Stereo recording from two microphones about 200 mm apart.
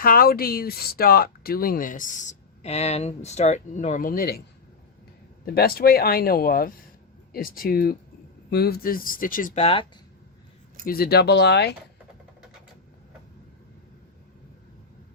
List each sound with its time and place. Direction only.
0.0 s speech: 45° left (ahead or behind)
5.5 s speech: 50° left (ahead or behind)
10.8 s speech: 50° left (ahead or behind)